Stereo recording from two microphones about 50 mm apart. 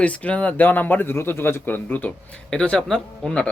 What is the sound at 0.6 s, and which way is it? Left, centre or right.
A man's voice, left.